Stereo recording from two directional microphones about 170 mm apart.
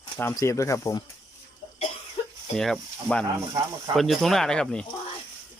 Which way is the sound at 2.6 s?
5° left (ahead or behind).